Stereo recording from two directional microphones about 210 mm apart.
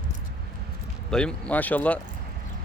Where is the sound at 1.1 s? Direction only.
5° left (ahead or behind).